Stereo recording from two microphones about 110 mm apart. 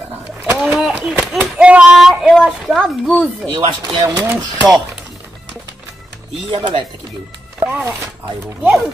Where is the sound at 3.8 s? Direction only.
40° right (ahead or behind).